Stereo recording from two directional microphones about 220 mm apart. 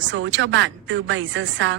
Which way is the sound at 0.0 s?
55° right (ahead or behind).